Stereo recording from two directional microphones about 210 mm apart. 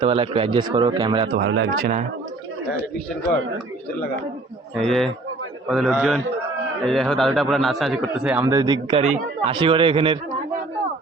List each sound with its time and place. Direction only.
0.0 s speech: 25° right (ahead or behind)
1.4 s speech: 65° right (ahead or behind)
1.7 s speech: 35° right (ahead or behind)
4.8 s speech: centre (ahead or behind)
8.4 s speech: 20° right (ahead or behind)